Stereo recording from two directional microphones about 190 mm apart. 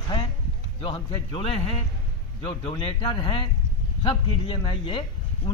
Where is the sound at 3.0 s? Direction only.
25° left (ahead or behind).